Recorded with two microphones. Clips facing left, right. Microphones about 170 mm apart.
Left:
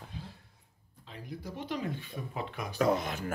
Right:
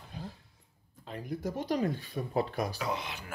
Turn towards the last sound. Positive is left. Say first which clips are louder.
# left 7 dB
turn(degrees=45)  # may be behind; listen again after turning